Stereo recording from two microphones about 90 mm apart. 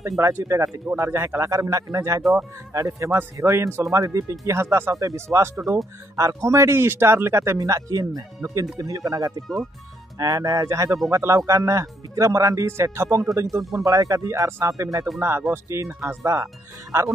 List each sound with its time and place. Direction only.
0.2 s speech: 30° right (ahead or behind)
15.1 s speech: 25° right (ahead or behind)